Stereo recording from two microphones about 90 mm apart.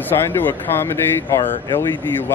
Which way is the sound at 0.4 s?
25° left (ahead or behind).